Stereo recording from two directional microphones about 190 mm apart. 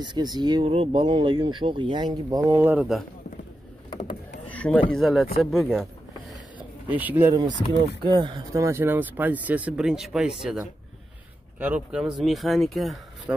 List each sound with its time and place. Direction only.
0.0 s speech: 20° right (ahead or behind); by 3.1 s 5° right (ahead or behind)
4.5 s a sound: 5° left (ahead or behind)
4.9 s speech: centre (ahead or behind)
6.9 s speech: 10° right (ahead or behind)
8.0 s speech: 25° right (ahead or behind); by 12.9 s centre (ahead or behind)